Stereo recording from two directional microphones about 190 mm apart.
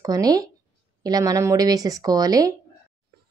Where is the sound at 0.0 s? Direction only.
20° right (ahead or behind).